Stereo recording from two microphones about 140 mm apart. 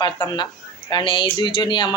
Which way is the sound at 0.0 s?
30° left (ahead or behind).